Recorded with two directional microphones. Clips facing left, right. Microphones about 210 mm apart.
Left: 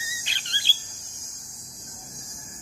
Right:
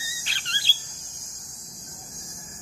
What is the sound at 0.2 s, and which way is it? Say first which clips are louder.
Rodents: right 1 dB; 20° left (ahead or behind).